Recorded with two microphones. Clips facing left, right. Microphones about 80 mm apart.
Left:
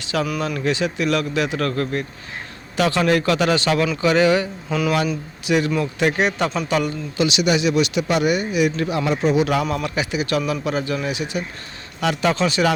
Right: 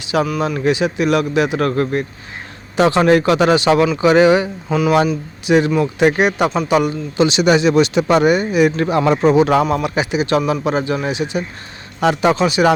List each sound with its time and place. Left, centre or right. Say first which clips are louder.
0.0 s a man's voice: right 5 dB; centre
7.3 s speech: right 5 dB; right; by 12.6 s centre